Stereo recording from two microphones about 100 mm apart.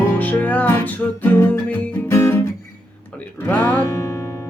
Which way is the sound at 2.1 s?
25° left (ahead or behind).